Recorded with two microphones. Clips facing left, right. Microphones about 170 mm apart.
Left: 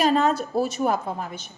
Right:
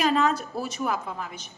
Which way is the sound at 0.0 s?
35° left (ahead or behind).